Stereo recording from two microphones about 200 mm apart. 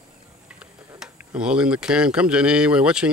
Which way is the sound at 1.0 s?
5° right (ahead or behind).